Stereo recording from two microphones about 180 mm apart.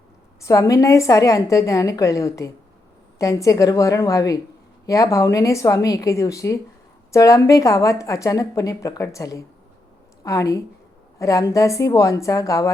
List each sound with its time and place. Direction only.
0.4 s a woman's voice: 15° left (ahead or behind)